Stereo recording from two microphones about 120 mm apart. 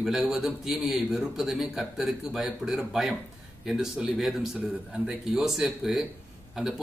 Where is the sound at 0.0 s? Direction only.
5° right (ahead or behind).